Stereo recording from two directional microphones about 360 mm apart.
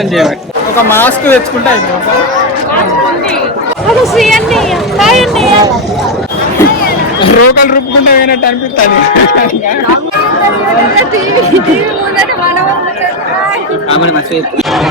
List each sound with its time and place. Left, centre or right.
0.9 s speech: centre
4.0 s speech: centre
7.3 s a man's voice: left